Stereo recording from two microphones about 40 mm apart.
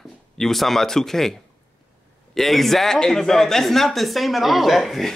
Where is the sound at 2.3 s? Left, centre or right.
Centre.